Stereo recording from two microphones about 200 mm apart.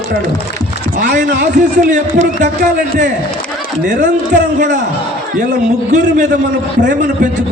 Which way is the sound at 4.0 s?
40° right (ahead or behind).